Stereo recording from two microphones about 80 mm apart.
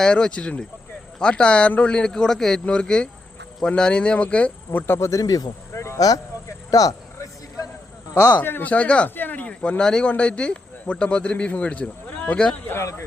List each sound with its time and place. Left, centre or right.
0.0 s speech: centre
4.9 s speech: left
5.2 s speech: left
6.7 s a sound: left
8.4 s speech: left
12.6 s speech: left